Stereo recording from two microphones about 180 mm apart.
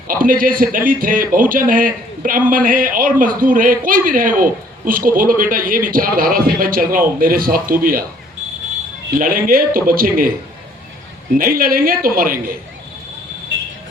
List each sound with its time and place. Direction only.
0.1 s a man's voice: 50° right (ahead or behind)
9.1 s a man's voice: 50° right (ahead or behind)
11.3 s a man's voice: 50° right (ahead or behind)